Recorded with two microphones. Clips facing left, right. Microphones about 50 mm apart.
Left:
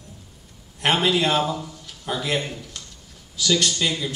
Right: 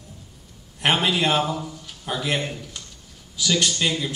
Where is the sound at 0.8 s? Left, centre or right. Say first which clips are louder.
Left 1 dB; centre.